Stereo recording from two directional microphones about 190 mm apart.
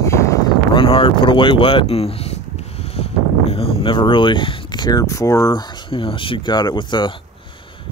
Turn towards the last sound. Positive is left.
turn(degrees=25)  # may be behind; listen again after turning